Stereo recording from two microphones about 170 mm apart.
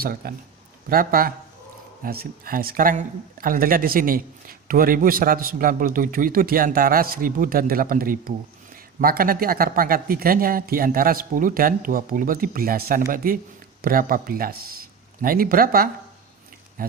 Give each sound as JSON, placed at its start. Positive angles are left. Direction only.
{"t": 0.0, "sound": "a man's voice", "side_deg": -60}